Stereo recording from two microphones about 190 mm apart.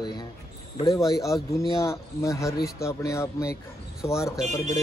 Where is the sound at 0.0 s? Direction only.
25° left (ahead or behind).